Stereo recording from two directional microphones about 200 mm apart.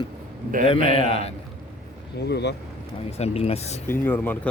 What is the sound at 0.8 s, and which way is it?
Speech, 40° right (ahead or behind).